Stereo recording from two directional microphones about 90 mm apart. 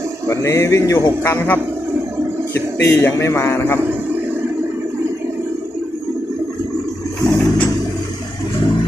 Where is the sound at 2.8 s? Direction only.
30° left (ahead or behind).